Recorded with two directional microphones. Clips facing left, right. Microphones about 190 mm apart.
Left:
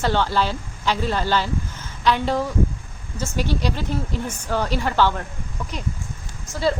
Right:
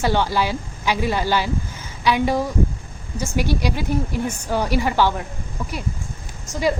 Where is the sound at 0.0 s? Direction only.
10° right (ahead or behind).